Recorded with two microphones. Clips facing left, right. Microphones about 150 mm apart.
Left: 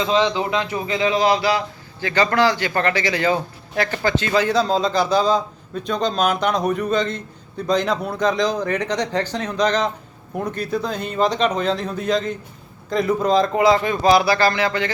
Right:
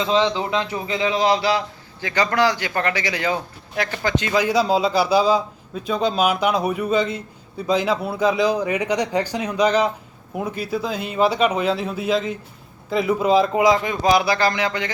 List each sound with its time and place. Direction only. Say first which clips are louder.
0.1 s a man's voice: even; 25° right (ahead or behind)
2.0 s a man's voice: left 2 dB; 15° right (ahead or behind)